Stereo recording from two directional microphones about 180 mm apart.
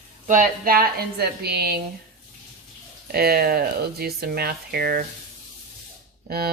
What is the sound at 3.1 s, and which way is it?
Speech, 60° right (ahead or behind).